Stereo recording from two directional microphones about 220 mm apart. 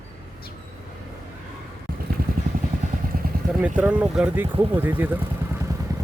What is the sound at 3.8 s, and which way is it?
Speech, 5° right (ahead or behind).